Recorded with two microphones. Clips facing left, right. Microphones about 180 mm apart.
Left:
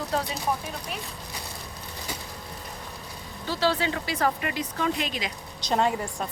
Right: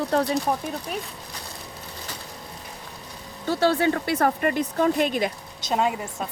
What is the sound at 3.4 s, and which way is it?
Speech, 50° right (ahead or behind).